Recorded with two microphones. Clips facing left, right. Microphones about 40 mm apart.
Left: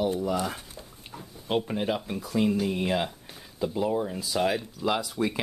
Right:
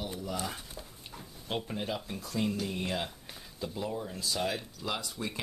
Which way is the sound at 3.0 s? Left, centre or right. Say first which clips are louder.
Left 3 dB; centre.